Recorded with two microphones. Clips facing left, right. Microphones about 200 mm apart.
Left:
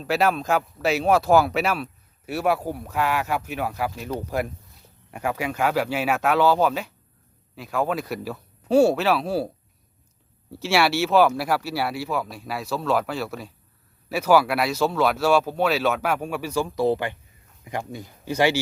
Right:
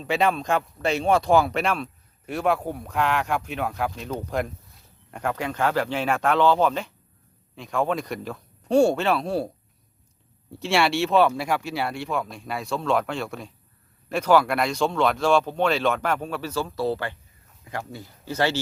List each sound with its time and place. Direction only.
0.0 s speech: 5° left (ahead or behind)
10.5 s speech: 5° left (ahead or behind)